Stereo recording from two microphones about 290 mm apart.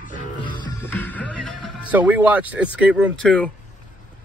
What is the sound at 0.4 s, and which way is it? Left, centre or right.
Speech, centre.